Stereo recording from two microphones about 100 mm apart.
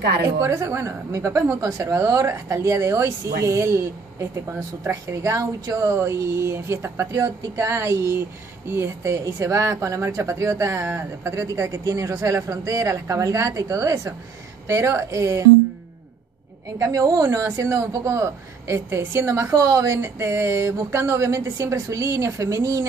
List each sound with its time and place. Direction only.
0.4 s a woman's voice: 30° right (ahead or behind)
16.7 s speech: 35° right (ahead or behind)